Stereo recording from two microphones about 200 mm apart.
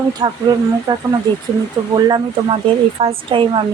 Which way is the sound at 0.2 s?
20° right (ahead or behind).